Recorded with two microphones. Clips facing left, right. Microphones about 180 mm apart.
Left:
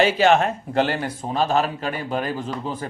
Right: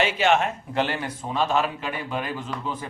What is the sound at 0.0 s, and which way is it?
Speech, 35° left (ahead or behind).